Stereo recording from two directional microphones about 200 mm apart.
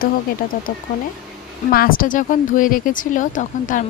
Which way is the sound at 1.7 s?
45° left (ahead or behind).